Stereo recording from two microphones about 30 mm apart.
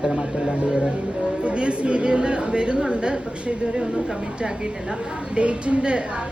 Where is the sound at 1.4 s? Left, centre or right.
Right.